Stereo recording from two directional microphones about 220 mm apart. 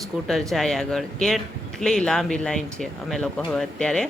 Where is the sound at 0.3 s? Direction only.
Centre (ahead or behind).